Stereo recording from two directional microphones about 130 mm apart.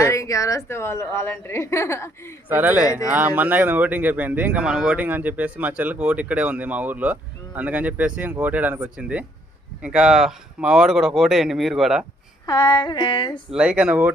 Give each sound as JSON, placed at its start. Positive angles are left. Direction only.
{"t": 0.0, "sound": "a woman's voice", "side_deg": 25}
{"t": 2.5, "sound": "speech", "side_deg": -15}
{"t": 12.7, "sound": "a sound", "side_deg": 35}
{"t": 13.5, "sound": "speech", "side_deg": -5}